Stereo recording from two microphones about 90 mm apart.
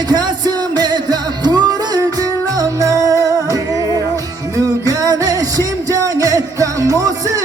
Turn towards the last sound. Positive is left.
turn(degrees=-40)  # may be behind; listen again after turning